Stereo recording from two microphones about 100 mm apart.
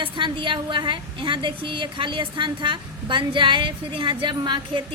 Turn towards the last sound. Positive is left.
turn(degrees=-50)  # may be behind; listen again after turning